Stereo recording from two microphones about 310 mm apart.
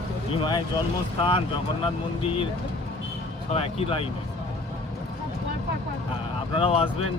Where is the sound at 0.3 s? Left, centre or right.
Centre.